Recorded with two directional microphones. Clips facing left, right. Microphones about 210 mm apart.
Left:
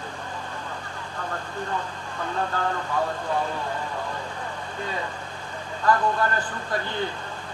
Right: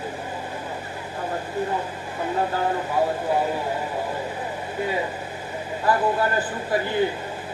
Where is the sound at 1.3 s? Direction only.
15° right (ahead or behind).